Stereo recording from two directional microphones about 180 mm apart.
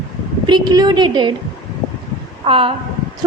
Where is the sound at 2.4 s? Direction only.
30° right (ahead or behind).